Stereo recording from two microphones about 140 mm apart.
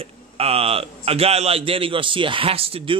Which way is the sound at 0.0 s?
45° right (ahead or behind).